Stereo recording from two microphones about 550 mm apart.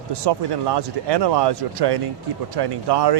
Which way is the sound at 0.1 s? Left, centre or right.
Right.